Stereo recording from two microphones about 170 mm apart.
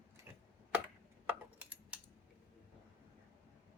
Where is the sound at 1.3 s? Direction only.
10° right (ahead or behind).